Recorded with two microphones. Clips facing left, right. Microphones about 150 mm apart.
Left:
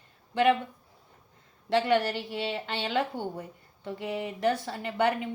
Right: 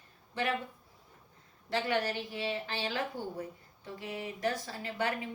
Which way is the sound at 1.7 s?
70° left (ahead or behind).